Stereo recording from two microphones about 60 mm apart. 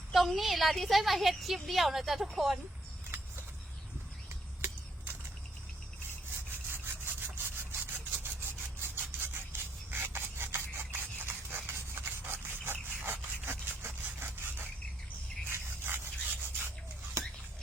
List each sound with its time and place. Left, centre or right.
0.1 s a woman's voice: centre
6.7 s sawing: right
9.9 s filing: right
15.4 s rub: right
17.2 s a sound: right